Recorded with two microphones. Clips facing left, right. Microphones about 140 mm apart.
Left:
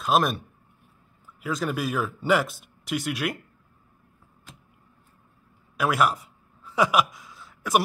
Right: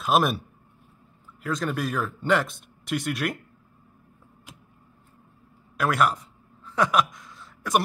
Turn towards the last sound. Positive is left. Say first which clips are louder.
# left 1 dB
turn(degrees=0)  # may be behind; listen again after turning